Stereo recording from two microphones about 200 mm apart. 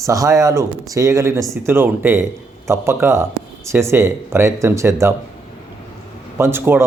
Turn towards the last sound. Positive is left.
turn(degrees=-10)  # may be behind; listen again after turning